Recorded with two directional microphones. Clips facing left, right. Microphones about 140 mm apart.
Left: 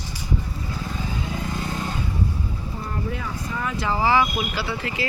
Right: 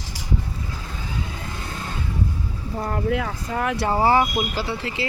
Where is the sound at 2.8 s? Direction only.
75° right (ahead or behind); by 5.0 s 30° right (ahead or behind).